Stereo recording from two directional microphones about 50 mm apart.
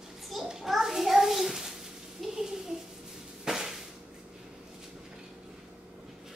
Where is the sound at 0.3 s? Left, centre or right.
Centre.